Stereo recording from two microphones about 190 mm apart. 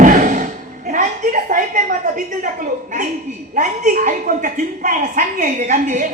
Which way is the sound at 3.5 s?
40° right (ahead or behind).